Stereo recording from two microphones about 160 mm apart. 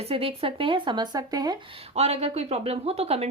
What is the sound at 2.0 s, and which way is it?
A woman's voice, 40° right (ahead or behind).